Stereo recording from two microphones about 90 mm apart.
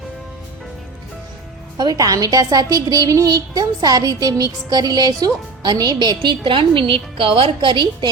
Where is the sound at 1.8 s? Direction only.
45° right (ahead or behind).